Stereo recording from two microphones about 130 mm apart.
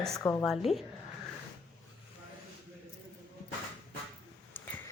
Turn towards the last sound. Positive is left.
turn(degrees=15)  # may be behind; listen again after turning